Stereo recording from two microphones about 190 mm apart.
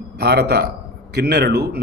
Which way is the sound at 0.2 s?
55° right (ahead or behind).